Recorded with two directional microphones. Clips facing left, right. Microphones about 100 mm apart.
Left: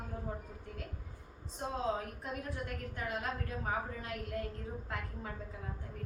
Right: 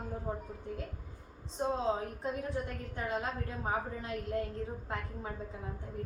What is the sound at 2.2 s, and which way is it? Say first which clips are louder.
A woman's voice: right 5 dB; 25° right (ahead or behind).